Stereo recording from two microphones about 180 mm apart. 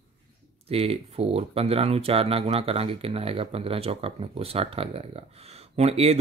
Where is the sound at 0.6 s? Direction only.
35° right (ahead or behind).